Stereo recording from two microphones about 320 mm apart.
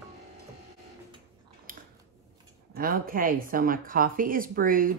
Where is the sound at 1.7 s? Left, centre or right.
Right.